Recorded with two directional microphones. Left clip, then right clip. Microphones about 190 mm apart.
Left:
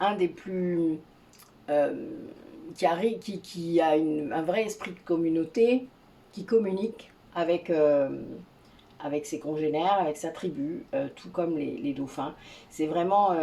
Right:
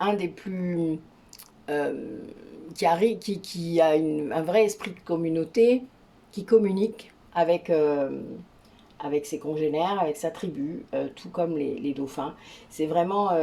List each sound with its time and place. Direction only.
0.0 s speech: 50° right (ahead or behind)
9.0 s speech: 50° right (ahead or behind)